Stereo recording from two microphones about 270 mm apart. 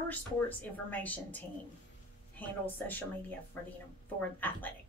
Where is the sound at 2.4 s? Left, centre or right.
Centre.